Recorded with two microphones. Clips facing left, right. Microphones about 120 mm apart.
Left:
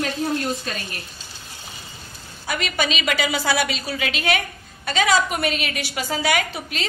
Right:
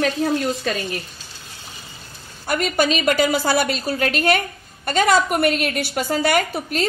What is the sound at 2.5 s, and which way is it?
A woman's voice, 45° right (ahead or behind).